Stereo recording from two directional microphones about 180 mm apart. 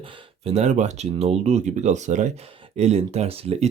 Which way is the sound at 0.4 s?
40° right (ahead or behind).